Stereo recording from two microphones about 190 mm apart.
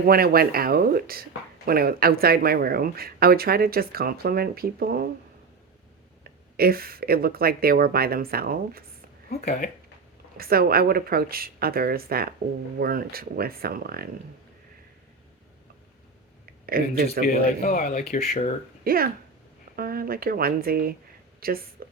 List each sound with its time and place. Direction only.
0.0 s speech: 50° right (ahead or behind)
6.2 s speech: 50° right (ahead or behind)
10.3 s speech: 50° right (ahead or behind)
16.6 s speech: 55° right (ahead or behind)
17.2 s a man's voice: 50° left (ahead or behind)
18.1 s speech: 40° left (ahead or behind)
18.9 s speech: 50° right (ahead or behind)